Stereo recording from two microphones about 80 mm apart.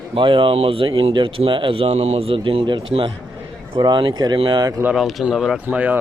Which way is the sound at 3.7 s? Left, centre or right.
Right.